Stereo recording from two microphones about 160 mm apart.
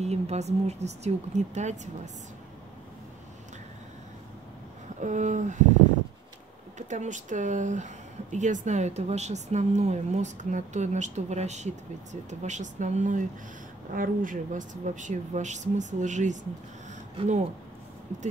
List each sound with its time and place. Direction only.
0.0 s speech: 40° right (ahead or behind)
5.0 s speech: 50° right (ahead or behind)
6.9 s speech: 50° right (ahead or behind)